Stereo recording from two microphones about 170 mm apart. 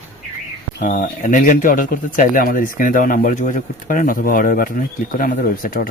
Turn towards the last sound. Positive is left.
turn(degrees=60)  # may be behind; listen again after turning